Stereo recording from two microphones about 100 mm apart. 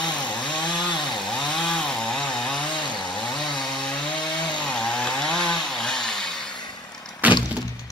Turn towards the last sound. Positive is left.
turn(degrees=-15)  # may be behind; listen again after turning